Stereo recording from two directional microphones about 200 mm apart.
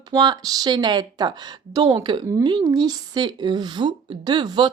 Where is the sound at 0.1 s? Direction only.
20° right (ahead or behind).